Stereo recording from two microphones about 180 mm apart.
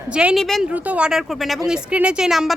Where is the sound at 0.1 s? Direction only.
5° right (ahead or behind).